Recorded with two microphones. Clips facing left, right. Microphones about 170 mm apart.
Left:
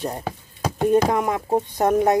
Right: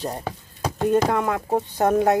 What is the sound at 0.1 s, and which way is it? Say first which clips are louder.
Speech: left 1 dB; 5° left (ahead or behind).